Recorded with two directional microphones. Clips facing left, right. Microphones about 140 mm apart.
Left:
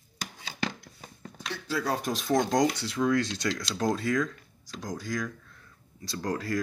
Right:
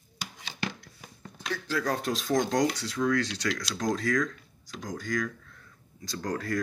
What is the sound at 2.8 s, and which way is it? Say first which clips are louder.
Speech: left 1 dB; 20° left (ahead or behind).